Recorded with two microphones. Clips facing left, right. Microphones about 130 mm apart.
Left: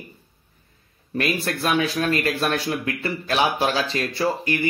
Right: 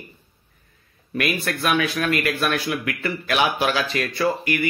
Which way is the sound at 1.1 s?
30° left (ahead or behind).